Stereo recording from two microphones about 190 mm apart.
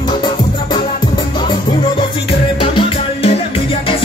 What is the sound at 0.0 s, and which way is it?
Music, 20° left (ahead or behind).